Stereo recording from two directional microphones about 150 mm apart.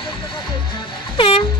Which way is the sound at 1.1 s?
35° left (ahead or behind).